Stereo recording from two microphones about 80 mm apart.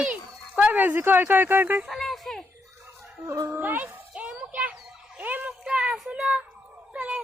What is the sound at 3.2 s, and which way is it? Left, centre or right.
Speech, right.